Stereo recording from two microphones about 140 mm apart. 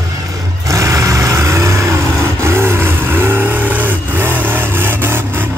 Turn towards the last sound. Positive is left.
turn(degrees=-15)  # may be behind; listen again after turning